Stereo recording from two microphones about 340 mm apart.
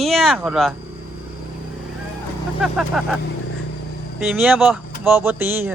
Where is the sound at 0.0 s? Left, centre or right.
Centre.